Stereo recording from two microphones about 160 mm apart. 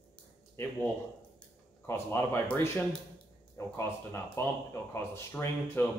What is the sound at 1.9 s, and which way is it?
Speech, 15° left (ahead or behind).